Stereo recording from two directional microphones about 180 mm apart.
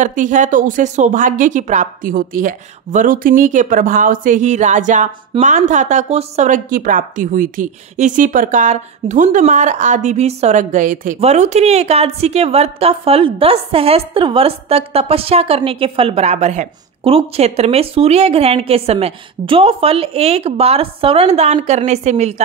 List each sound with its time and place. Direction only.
0.0 s a woman's voice: 45° right (ahead or behind)